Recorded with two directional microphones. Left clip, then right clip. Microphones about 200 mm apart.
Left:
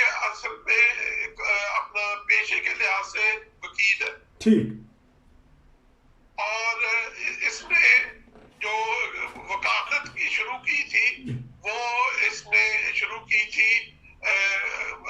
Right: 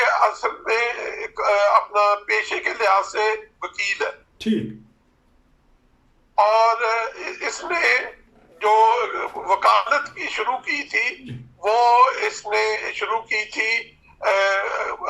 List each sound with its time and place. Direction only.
0.0 s speech: 40° right (ahead or behind)
6.3 s speech: 40° right (ahead or behind)